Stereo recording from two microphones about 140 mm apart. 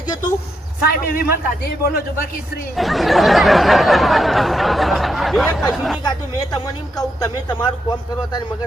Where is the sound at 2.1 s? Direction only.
90° left.